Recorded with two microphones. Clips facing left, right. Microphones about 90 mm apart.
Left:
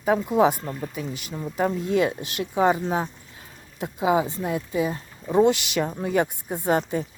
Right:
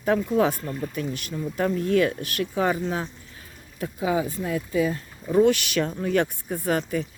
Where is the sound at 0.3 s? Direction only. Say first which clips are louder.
Left 2 dB; 15° left (ahead or behind).